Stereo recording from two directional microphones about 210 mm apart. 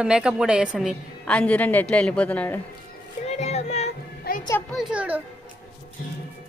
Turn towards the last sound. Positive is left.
turn(degrees=-5)  # may be behind; listen again after turning